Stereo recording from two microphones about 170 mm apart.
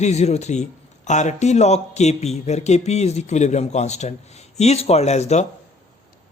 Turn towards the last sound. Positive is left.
turn(degrees=40)  # may be behind; listen again after turning